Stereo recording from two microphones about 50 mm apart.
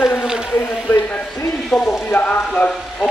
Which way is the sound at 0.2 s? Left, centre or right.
Centre.